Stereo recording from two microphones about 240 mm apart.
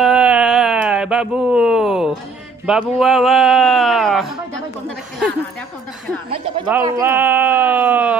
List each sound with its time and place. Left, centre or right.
0.0 s a sound: centre
2.6 s speech: centre
6.3 s speech: right
7.0 s speech: centre